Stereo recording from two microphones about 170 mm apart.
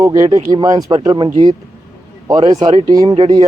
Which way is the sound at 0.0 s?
20° right (ahead or behind).